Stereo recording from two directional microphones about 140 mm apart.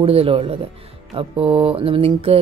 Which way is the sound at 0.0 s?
45° right (ahead or behind).